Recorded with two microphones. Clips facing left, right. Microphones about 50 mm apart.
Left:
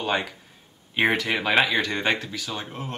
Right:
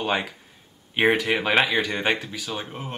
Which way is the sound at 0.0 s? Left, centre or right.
Centre.